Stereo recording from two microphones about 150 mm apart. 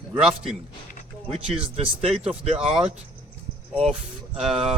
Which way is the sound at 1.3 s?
40° right (ahead or behind).